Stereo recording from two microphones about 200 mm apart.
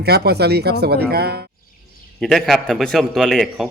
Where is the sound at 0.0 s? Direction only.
55° right (ahead or behind).